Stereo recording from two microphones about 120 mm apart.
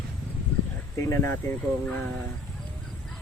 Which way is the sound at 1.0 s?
25° left (ahead or behind).